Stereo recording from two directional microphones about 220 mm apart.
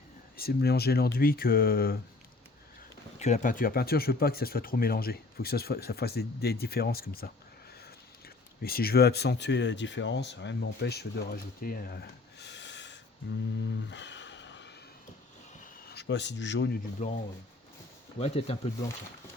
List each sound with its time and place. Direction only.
0.3 s speech: 45° left (ahead or behind)
3.2 s speech: 30° left (ahead or behind)
8.6 s speech: 45° left (ahead or behind)
13.9 s a sound: 55° left (ahead or behind)
15.9 s speech: 50° left (ahead or behind)
17.0 s speech: 30° left (ahead or behind)
18.2 s speech: 30° left (ahead or behind)